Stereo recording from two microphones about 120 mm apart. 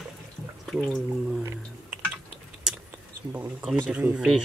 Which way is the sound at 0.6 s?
Centre (ahead or behind).